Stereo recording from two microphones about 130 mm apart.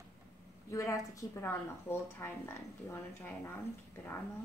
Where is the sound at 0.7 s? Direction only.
25° left (ahead or behind).